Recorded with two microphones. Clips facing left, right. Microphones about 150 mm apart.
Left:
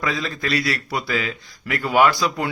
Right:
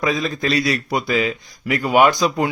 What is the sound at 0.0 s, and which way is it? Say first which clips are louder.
Speech: right 5 dB; 20° right (ahead or behind).